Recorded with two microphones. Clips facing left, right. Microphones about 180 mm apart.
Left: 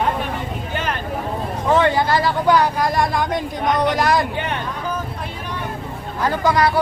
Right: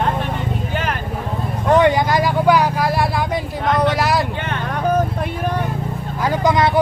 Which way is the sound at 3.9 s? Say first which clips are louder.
Even; 5° right (ahead or behind).